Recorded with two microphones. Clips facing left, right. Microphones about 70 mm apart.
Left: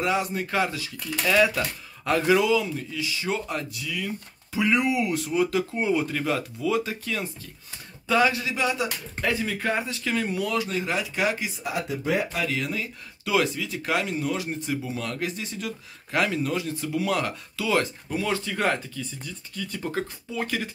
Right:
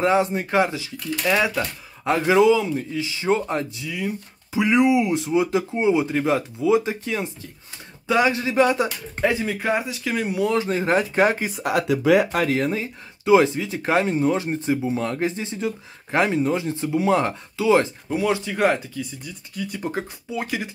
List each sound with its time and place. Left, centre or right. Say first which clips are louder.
0.0 s speech: right 6 dB; right
9.2 s speech: right 4 dB; centre; by 11.5 s right
11.5 s speech: right 8 dB; right
12.3 s speech: right 7 dB; right; by 20.7 s centre